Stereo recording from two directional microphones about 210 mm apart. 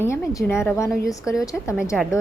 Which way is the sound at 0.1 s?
10° left (ahead or behind).